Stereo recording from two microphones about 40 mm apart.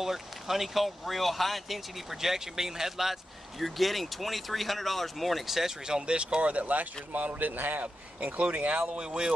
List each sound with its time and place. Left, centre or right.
0.0 s speech: centre; by 6.9 s right
7.3 s a man's voice: right
7.8 s speech: right